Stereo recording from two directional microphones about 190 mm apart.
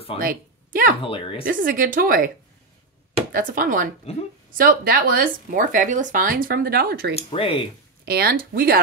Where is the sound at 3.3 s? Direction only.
50° right (ahead or behind).